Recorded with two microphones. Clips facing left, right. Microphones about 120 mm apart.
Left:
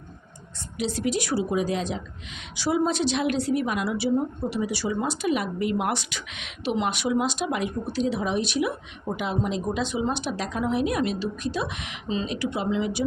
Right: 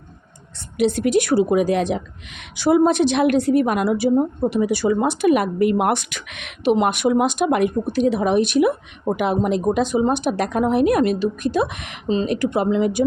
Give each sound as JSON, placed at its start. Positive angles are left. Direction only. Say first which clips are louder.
{"t": 0.8, "sound": "a woman's voice", "louder": "right 9 dB", "side_deg": -60}
{"t": 12.0, "sound": "speech", "louder": "right 8 dB", "side_deg": -35}
{"t": 12.3, "sound": "speech", "louder": "right 7 dB", "side_deg": -50}